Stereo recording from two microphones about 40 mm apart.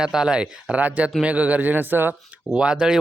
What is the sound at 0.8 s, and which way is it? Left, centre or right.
A man's voice, right.